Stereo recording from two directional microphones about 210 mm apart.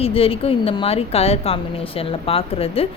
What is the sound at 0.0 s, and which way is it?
A woman's voice, 25° left (ahead or behind).